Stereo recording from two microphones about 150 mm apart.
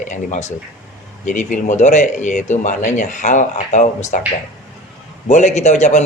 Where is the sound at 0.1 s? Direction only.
50° left (ahead or behind).